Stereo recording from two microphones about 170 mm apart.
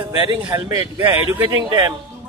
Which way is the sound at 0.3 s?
25° right (ahead or behind).